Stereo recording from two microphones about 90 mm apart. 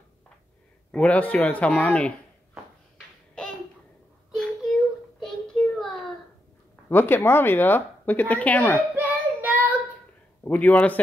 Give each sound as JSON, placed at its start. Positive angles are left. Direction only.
{"t": 0.9, "sound": "speech", "side_deg": 15}
{"t": 4.3, "sound": "a sound", "side_deg": 0}
{"t": 5.2, "sound": "child singing", "side_deg": 10}
{"t": 6.9, "sound": "speech", "side_deg": 20}
{"t": 8.9, "sound": "child singing", "side_deg": -20}
{"t": 10.4, "sound": "speech", "side_deg": 15}